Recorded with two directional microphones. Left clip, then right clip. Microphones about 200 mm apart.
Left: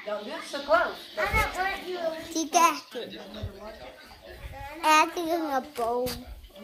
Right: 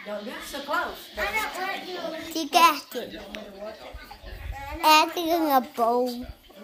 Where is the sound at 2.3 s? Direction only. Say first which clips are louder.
Right 4 dB; 10° right (ahead or behind).